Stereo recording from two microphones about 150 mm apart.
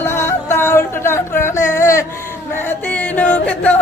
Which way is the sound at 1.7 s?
20° left (ahead or behind).